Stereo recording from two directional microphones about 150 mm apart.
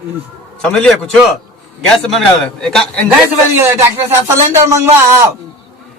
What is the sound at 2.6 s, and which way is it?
Speech, 5° left (ahead or behind).